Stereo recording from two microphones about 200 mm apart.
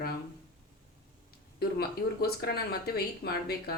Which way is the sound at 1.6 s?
50° left (ahead or behind).